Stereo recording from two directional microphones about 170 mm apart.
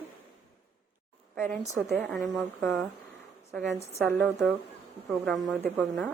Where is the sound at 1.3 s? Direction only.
5° left (ahead or behind).